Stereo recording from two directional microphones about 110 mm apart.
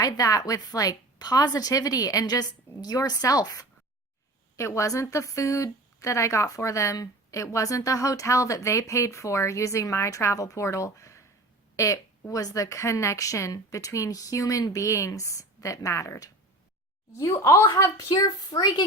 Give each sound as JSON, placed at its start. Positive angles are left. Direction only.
{"t": 0.0, "sound": "a woman's voice", "side_deg": 30}